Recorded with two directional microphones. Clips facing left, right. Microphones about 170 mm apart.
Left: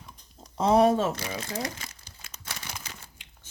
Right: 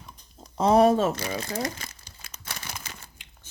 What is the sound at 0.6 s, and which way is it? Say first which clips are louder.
Speech: right 2 dB; 45° right (ahead or behind).